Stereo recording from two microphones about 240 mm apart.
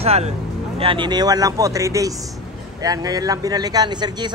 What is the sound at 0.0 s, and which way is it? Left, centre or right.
Speech, right.